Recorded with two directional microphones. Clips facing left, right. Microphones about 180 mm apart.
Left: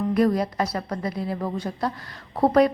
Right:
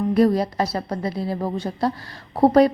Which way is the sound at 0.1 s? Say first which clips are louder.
Right 4 dB; 30° right (ahead or behind).